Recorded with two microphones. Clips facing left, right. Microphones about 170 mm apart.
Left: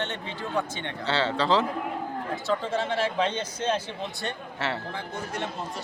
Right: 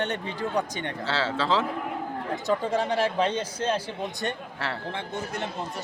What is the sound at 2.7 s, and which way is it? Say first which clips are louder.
Speech: right 2 dB; 40° right (ahead or behind).